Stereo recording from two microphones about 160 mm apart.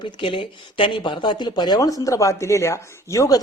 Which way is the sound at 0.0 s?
30° left (ahead or behind).